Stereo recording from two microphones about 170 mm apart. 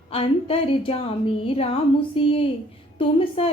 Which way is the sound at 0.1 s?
35° left (ahead or behind).